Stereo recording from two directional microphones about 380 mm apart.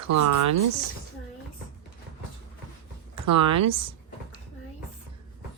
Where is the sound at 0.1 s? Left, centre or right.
Right.